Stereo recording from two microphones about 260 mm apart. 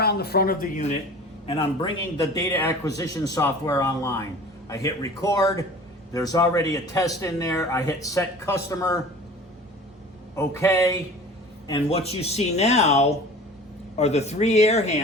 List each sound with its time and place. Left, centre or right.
0.0 s speech: left
2.3 s speech: centre
10.3 s speech: centre
11.7 s speech: left